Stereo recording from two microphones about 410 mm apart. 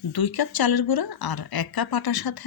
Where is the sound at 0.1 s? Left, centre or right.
Left.